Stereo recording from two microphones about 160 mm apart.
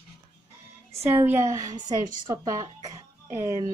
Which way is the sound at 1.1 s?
15° right (ahead or behind).